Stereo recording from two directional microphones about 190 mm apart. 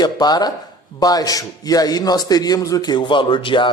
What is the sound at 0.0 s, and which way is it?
A man's voice, 20° left (ahead or behind).